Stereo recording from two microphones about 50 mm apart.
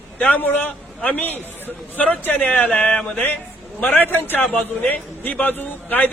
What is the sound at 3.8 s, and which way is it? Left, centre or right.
A man's voice, left.